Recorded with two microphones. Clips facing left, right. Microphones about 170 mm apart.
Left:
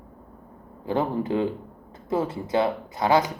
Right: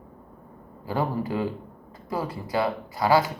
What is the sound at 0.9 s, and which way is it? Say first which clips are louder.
Speech: left 3 dB; 20° left (ahead or behind).